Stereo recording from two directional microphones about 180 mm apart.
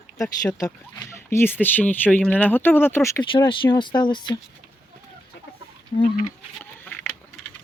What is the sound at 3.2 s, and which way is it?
Speech, 25° left (ahead or behind).